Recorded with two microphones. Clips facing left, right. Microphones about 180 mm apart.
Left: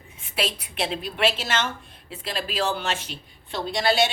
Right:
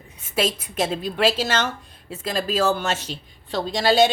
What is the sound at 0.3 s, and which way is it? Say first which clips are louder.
Speech: right 5 dB; 45° right (ahead or behind).